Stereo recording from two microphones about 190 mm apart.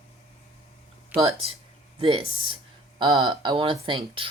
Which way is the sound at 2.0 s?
25° right (ahead or behind).